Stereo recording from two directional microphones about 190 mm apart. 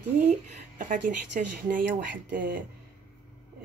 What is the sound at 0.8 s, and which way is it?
A woman's voice, 45° right (ahead or behind).